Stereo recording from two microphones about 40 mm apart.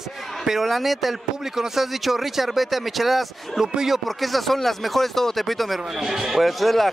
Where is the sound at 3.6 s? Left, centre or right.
Centre.